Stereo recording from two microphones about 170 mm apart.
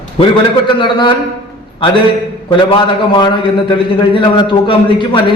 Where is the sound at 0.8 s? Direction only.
30° left (ahead or behind).